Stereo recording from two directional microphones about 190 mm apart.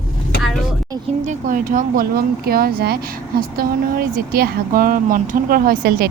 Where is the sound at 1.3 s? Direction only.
45° right (ahead or behind).